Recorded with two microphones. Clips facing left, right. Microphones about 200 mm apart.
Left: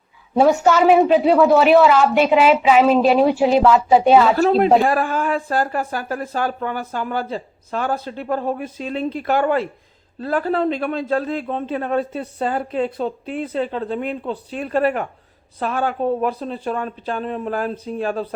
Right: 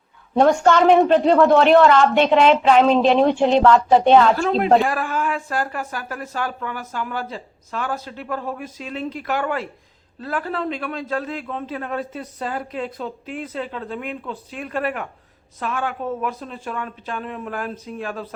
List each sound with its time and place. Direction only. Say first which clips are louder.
0.3 s speech: left 1 dB; 5° left (ahead or behind)
4.4 s a man's voice: left 3 dB; 40° left (ahead or behind)